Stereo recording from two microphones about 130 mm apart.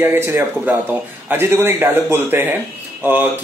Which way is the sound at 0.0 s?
15° right (ahead or behind).